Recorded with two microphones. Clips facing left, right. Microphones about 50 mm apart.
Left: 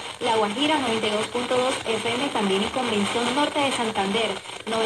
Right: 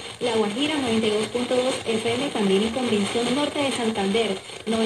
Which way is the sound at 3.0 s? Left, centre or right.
Left.